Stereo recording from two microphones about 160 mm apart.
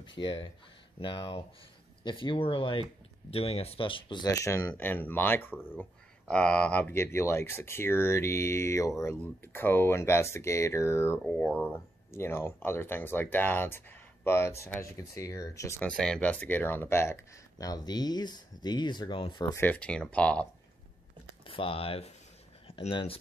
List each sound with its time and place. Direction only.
0.0 s speech: 30° left (ahead or behind)
15.9 s speech: 5° left (ahead or behind); by 19.4 s 30° left (ahead or behind)
19.5 s speech: 10° left (ahead or behind)
21.5 s speech: 35° left (ahead or behind)